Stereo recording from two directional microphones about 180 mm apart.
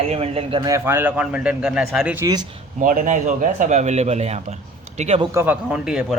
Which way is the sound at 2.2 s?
20° right (ahead or behind).